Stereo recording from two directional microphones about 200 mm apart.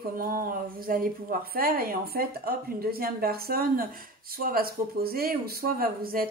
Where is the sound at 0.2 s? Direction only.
45° right (ahead or behind).